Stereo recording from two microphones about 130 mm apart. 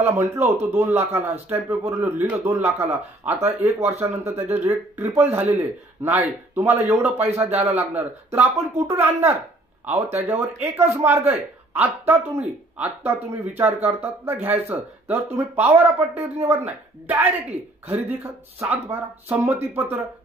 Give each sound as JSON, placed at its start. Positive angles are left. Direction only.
{"t": 0.0, "sound": "speech", "side_deg": -15}
{"t": 7.4, "sound": "a man's voice", "side_deg": -55}
{"t": 8.3, "sound": "speech", "side_deg": -20}
{"t": 9.8, "sound": "speech", "side_deg": -50}
{"t": 10.1, "sound": "speech", "side_deg": -20}